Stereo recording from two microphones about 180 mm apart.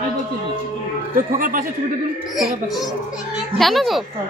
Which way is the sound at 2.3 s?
Centre (ahead or behind).